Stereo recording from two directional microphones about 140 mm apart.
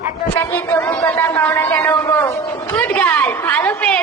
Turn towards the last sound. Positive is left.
turn(degrees=10)  # may be behind; listen again after turning